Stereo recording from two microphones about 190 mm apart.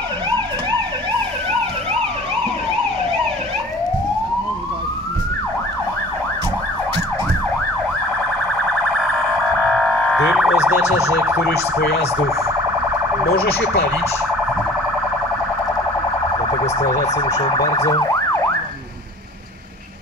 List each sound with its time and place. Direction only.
9.7 s a sound: 5° left (ahead or behind)
16.6 s siren: 35° left (ahead or behind)
17.3 s speech: 25° left (ahead or behind)
17.7 s emergency vehicle: 20° left (ahead or behind)